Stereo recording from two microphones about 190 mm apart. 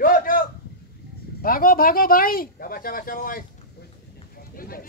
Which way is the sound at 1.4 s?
50° left (ahead or behind).